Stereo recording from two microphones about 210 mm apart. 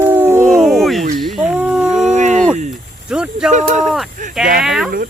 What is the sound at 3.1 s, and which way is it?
Speech, 5° right (ahead or behind).